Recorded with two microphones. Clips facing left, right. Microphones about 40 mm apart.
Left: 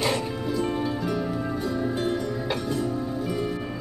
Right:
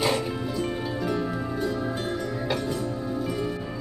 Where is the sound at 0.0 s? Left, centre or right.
Centre.